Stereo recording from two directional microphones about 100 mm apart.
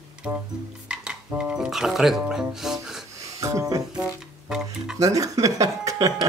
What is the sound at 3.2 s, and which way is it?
Speech, 35° right (ahead or behind).